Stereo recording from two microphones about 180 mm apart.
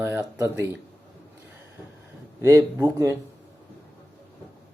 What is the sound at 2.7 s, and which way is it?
Speech, 15° right (ahead or behind).